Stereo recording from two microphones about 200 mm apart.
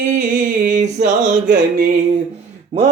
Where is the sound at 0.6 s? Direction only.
40° right (ahead or behind).